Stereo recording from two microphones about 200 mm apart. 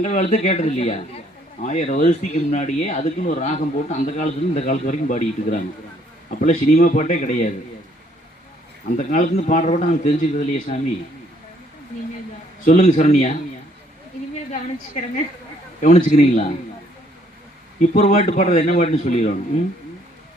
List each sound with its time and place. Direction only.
0.0 s speech: 35° left (ahead or behind)
9.0 s speech: 40° left (ahead or behind)
12.6 s speech: 40° left (ahead or behind)
14.5 s speech: 40° left (ahead or behind)
17.7 s speech: 40° left (ahead or behind)